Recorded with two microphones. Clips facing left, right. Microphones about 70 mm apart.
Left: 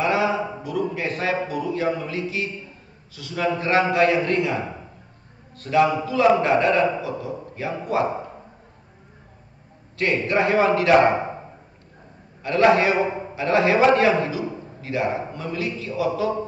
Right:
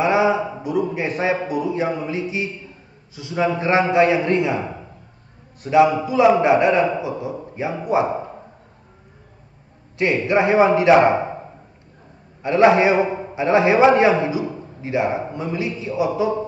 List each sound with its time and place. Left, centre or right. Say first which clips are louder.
0.0 s a sound: right 4 dB; right
0.6 s a man's voice: right 4 dB; right
9.9 s a man's voice: right 3 dB; centre
12.4 s a man's voice: right 3 dB; right